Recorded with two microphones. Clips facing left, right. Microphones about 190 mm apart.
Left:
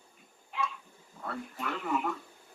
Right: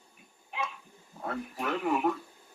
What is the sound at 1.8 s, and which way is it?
Speech, 15° right (ahead or behind).